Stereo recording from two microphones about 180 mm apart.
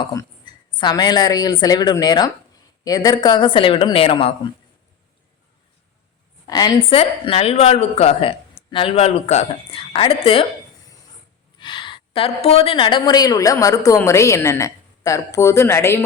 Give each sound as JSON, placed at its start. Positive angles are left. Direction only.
{"t": 0.0, "sound": "a woman's voice", "side_deg": 20}
{"t": 6.5, "sound": "a woman's voice", "side_deg": 20}
{"t": 6.9, "sound": "a woman's voice", "side_deg": 35}
{"t": 11.6, "sound": "a woman's voice", "side_deg": 25}